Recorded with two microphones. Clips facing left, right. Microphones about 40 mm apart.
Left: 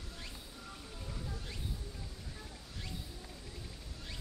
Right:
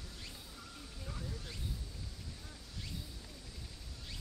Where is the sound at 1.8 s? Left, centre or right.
Left.